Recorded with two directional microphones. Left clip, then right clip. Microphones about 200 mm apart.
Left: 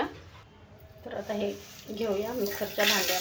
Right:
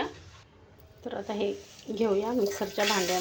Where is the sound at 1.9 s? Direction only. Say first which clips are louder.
Right 5 dB; 40° right (ahead or behind).